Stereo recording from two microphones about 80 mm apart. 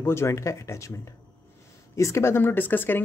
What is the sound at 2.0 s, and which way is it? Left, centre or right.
Speech, left.